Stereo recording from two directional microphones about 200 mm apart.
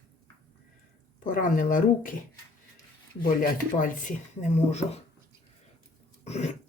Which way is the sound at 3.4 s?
40° left (ahead or behind).